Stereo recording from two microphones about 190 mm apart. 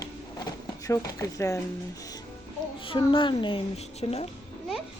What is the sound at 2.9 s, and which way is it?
Speech, 25° left (ahead or behind).